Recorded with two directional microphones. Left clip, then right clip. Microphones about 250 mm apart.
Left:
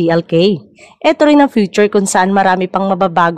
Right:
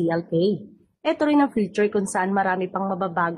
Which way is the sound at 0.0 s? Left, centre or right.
Left.